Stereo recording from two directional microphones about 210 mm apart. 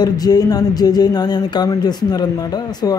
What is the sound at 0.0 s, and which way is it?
Speech, 20° left (ahead or behind).